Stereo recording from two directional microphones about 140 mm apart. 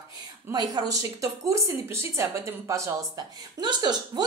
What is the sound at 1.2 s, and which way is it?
Speech, 20° right (ahead or behind).